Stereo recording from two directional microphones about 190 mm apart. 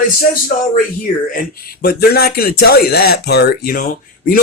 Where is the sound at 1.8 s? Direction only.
55° left (ahead or behind).